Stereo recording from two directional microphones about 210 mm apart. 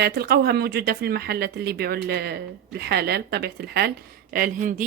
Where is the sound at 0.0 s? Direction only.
50° right (ahead or behind).